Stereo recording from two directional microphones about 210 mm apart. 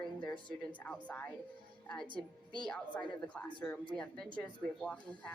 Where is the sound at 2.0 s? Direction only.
25° right (ahead or behind).